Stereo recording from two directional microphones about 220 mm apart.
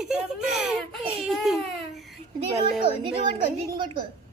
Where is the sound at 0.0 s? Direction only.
5° right (ahead or behind).